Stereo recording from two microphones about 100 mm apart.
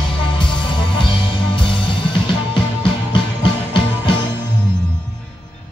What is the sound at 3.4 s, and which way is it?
Music, 55° left (ahead or behind).